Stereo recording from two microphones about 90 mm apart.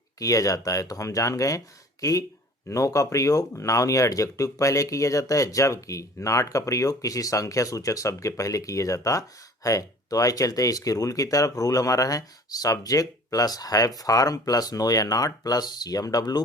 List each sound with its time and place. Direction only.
0.2 s speech: 40° left (ahead or behind)